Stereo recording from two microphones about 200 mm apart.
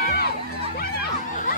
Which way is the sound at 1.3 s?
40° left (ahead or behind).